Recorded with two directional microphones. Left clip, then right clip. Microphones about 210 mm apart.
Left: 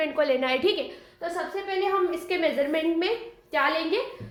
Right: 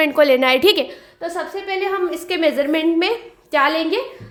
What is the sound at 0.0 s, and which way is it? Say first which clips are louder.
A woman's voice: right 10 dB; 45° right (ahead or behind).